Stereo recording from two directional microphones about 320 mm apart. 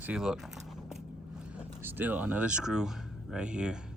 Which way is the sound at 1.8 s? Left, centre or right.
Centre.